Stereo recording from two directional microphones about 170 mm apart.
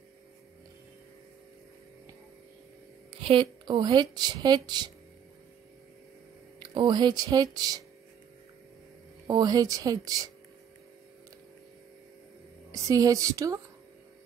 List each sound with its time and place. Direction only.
3.1 s speech: 30° right (ahead or behind)
6.6 s speech: 25° right (ahead or behind)
9.3 s speech: 20° right (ahead or behind)
12.8 s speech: 20° right (ahead or behind)